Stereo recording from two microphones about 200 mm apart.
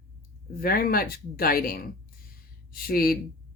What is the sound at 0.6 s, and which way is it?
Speech, 50° left (ahead or behind).